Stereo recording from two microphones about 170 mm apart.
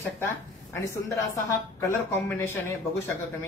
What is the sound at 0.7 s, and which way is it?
Speech, 15° left (ahead or behind).